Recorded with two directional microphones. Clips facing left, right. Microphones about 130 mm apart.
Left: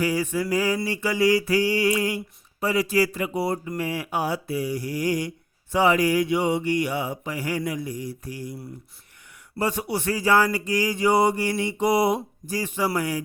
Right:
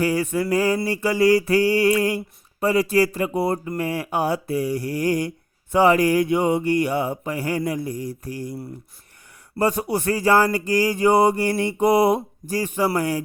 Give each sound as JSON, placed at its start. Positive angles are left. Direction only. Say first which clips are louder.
{"t": 0.0, "sound": "speech", "louder": "right 3 dB", "side_deg": -55}
{"t": 9.6, "sound": "speech", "louder": "right 4 dB", "side_deg": -45}